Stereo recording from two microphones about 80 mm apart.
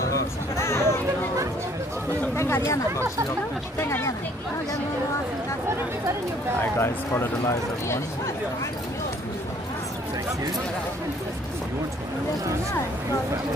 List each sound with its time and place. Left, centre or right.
0.6 s a sound: left
2.3 s chatter: left
3.8 s speech: left
6.8 s speech: left